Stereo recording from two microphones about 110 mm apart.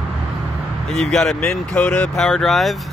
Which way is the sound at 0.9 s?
5° left (ahead or behind).